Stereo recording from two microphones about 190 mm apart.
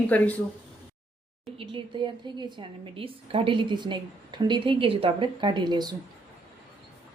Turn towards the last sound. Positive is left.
turn(degrees=-20)  # may be behind; listen again after turning